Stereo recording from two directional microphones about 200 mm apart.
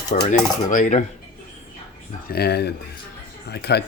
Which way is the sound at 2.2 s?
50° left (ahead or behind).